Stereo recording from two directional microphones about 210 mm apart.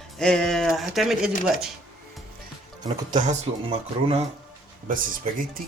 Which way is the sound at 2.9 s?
35° right (ahead or behind).